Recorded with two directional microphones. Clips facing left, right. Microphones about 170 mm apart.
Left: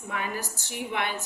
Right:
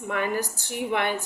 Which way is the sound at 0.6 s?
55° right (ahead or behind).